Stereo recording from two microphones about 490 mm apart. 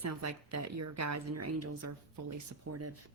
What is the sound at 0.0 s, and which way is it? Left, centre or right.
Speech, right.